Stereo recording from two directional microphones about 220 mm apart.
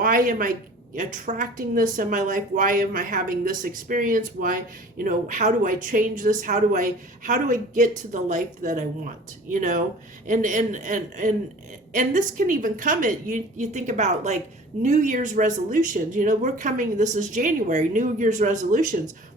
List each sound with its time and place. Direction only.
0.0 s speech: 40° right (ahead or behind)